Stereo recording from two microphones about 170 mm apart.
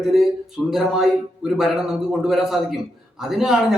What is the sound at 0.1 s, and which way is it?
A man's voice, centre (ahead or behind).